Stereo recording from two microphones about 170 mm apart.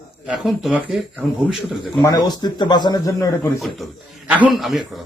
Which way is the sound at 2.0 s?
25° left (ahead or behind).